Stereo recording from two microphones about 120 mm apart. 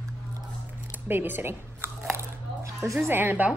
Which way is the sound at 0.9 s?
15° right (ahead or behind).